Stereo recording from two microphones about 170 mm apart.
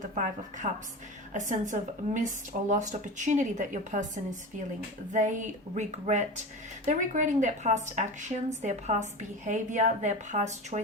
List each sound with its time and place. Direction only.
0.6 s speech: 45° right (ahead or behind)